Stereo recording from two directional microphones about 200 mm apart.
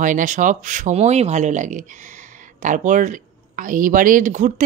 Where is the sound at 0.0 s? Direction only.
40° right (ahead or behind).